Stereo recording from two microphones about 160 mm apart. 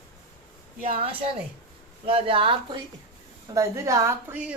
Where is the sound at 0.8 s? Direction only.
35° right (ahead or behind).